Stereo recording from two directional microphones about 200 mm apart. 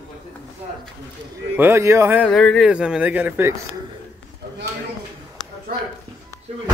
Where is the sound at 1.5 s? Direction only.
10° right (ahead or behind).